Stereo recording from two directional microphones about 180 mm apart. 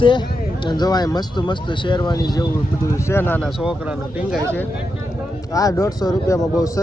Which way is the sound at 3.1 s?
10° left (ahead or behind).